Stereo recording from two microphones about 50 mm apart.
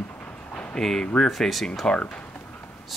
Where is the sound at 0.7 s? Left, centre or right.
Centre.